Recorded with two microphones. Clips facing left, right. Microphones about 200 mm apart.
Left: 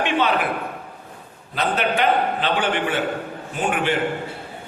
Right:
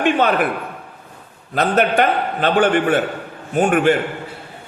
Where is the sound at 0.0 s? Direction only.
50° right (ahead or behind).